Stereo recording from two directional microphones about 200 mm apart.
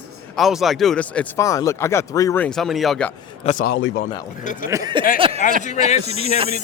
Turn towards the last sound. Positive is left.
turn(degrees=30)  # may be behind; listen again after turning